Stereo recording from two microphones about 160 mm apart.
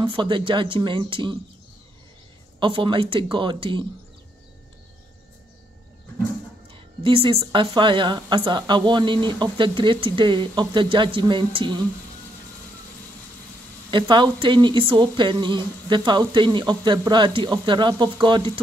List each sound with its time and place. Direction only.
0.0 s speech: 30° right (ahead or behind)
2.6 s speech: 30° right (ahead or behind)
6.7 s speech: 35° right (ahead or behind)
13.8 s speech: 30° right (ahead or behind)